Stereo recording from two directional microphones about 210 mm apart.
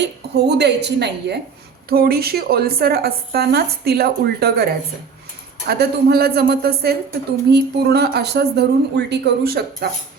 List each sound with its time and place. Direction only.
0.0 s a woman's voice: 50° right (ahead or behind)